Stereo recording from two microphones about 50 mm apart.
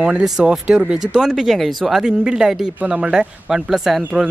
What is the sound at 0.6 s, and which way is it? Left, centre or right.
Speech, centre.